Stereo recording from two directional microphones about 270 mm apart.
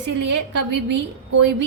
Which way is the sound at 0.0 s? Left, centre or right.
Right.